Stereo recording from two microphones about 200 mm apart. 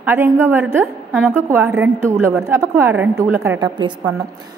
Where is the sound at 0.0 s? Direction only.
10° right (ahead or behind).